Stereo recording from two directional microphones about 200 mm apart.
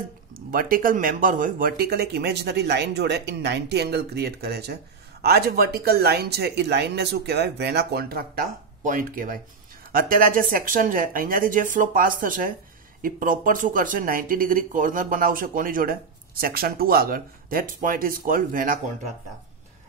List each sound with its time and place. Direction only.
0.5 s speech: 45° right (ahead or behind)